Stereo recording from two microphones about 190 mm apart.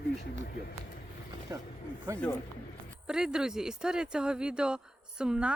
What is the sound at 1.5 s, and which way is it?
Speech, 20° right (ahead or behind).